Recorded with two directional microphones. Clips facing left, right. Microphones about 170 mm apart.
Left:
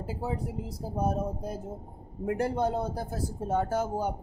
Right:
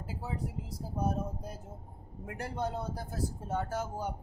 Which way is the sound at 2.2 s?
30° left (ahead or behind).